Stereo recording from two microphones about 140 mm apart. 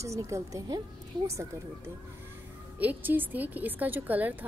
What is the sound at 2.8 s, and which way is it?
A woman's voice, 10° right (ahead or behind).